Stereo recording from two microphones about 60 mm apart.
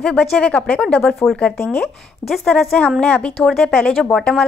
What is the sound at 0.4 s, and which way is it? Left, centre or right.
Speech, centre.